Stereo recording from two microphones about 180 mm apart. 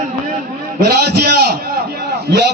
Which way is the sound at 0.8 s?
65° right (ahead or behind).